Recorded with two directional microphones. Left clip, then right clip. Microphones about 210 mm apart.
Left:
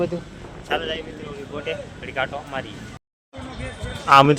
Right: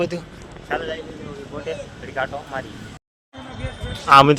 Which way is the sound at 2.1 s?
10° right (ahead or behind).